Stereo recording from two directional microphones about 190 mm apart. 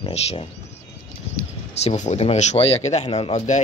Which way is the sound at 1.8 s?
35° left (ahead or behind).